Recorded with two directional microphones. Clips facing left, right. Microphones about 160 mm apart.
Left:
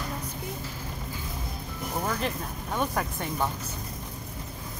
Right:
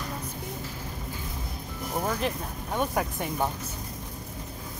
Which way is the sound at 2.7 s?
15° right (ahead or behind).